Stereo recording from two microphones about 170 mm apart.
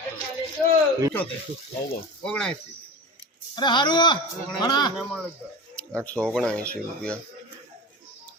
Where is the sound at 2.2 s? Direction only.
5° left (ahead or behind).